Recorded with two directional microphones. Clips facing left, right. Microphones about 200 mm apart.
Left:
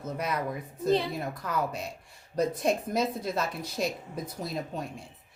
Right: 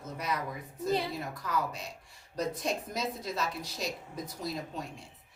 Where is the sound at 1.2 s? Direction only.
55° left (ahead or behind).